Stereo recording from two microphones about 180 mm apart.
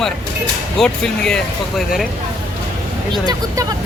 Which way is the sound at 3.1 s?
20° right (ahead or behind).